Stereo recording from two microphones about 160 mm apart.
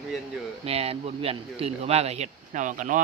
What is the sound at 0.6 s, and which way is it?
Speech, 40° right (ahead or behind).